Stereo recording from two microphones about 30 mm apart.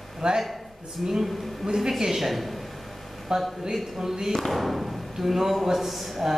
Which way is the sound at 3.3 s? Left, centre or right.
Centre.